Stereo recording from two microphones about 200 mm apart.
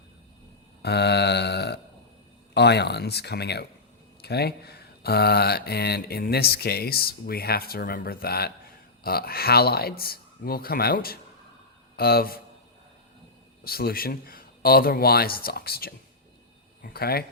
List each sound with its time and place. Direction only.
0.8 s mantra: 55° left (ahead or behind)
2.6 s speech: 55° left (ahead or behind)
13.7 s speech: 50° left (ahead or behind)